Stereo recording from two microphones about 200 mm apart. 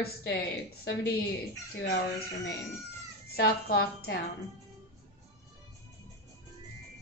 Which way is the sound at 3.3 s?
50° left (ahead or behind).